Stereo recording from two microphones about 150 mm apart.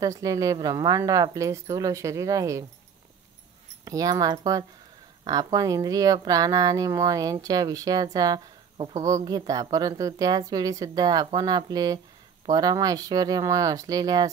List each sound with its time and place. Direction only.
0.0 s a woman's voice: 25° right (ahead or behind)
3.8 s a woman's voice: 25° right (ahead or behind)